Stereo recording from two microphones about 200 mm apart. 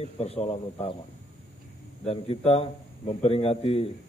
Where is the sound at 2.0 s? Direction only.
30° left (ahead or behind).